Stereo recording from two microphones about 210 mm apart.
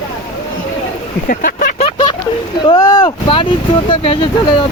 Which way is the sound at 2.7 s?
20° left (ahead or behind).